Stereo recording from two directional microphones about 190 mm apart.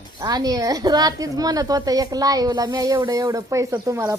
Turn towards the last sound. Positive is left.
turn(degrees=-15)  # may be behind; listen again after turning